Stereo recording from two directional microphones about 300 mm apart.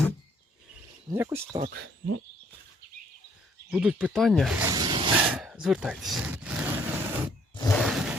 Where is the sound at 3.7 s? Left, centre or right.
Centre.